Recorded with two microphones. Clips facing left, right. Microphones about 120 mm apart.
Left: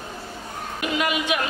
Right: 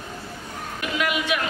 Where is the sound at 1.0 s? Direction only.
20° left (ahead or behind).